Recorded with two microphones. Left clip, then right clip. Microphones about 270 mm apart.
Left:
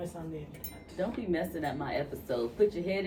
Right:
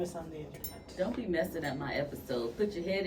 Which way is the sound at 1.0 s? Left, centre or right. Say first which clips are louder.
Even; centre.